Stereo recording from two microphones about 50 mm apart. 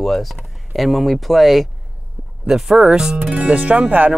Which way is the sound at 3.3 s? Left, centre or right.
Right.